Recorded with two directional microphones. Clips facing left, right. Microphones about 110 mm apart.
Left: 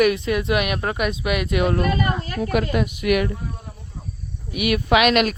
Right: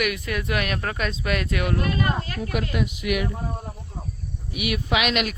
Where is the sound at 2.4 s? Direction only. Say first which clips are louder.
Left 9 dB; 60° left (ahead or behind).